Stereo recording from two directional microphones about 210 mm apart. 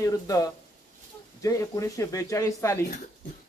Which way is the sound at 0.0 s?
15° left (ahead or behind).